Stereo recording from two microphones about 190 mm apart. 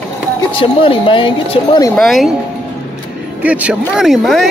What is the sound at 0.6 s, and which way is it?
Speech, 30° left (ahead or behind).